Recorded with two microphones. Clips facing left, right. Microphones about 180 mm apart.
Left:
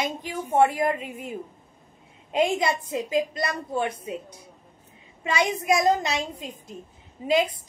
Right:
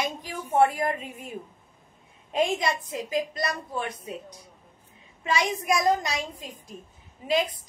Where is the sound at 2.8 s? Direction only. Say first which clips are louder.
Left 4 dB; 25° left (ahead or behind).